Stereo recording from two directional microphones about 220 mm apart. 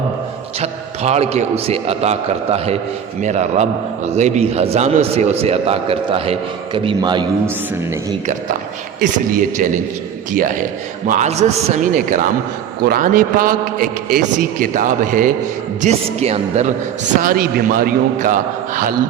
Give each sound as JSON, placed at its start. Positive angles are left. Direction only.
{"t": 0.6, "sound": "a man's voice", "side_deg": -30}
{"t": 9.0, "sound": "a man's voice", "side_deg": -35}
{"t": 17.2, "sound": "a man's voice", "side_deg": -40}